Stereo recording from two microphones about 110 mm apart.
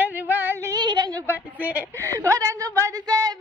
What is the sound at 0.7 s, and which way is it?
Speech, 40° right (ahead or behind).